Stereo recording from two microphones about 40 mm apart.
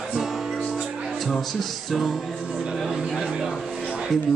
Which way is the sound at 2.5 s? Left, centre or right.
Centre.